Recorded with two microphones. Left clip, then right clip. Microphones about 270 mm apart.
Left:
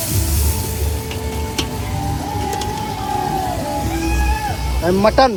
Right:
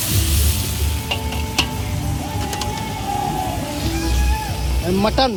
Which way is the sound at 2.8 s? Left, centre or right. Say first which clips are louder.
Left 2 dB; centre.